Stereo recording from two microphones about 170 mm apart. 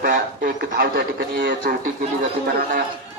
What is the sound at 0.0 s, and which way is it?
A man's voice, 55° right (ahead or behind).